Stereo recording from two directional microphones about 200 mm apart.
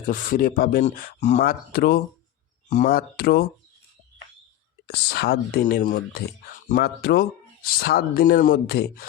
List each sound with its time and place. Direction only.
0.0 s speech: 40° left (ahead or behind)
4.9 s speech: 55° left (ahead or behind)